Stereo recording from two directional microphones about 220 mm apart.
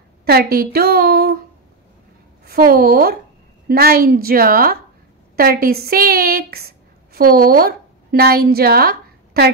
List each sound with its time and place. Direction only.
0.2 s a woman's voice: 45° right (ahead or behind)
2.4 s a woman's voice: 40° right (ahead or behind)